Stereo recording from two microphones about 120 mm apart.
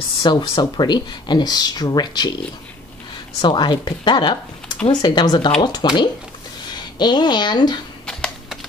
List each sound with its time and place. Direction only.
0.2 s speech: 40° left (ahead or behind)
3.3 s speech: 40° left (ahead or behind)
7.0 s speech: 40° left (ahead or behind)
8.1 s typing: 5° left (ahead or behind)